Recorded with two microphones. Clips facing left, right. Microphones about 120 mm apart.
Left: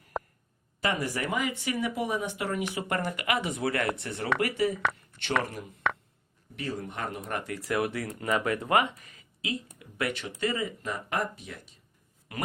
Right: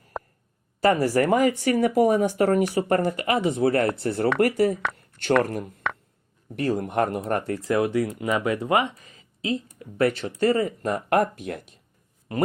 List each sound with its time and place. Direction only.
0.1 s a sound: centre (ahead or behind)
0.8 s speech: 40° right (ahead or behind)
6.7 s speech: 65° right (ahead or behind)
7.3 s speech: 35° right (ahead or behind); by 11.6 s 55° right (ahead or behind)